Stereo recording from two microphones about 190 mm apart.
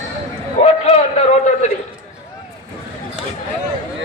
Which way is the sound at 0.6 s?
35° left (ahead or behind).